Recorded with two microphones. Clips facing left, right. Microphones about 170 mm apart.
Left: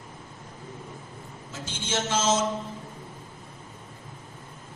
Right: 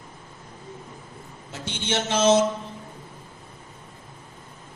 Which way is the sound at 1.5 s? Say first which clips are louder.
Right 3 dB; 65° right (ahead or behind).